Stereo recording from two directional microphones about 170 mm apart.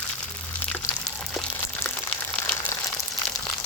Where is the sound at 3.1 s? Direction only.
Centre (ahead or behind).